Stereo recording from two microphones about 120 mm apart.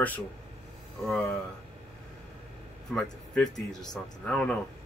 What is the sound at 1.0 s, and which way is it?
Speech, 5° left (ahead or behind).